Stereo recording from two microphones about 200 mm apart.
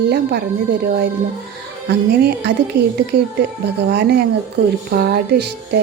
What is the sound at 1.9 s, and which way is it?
A woman's voice, 55° right (ahead or behind).